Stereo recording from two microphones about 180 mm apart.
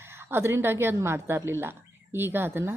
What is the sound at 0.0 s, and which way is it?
A woman's voice, 15° right (ahead or behind).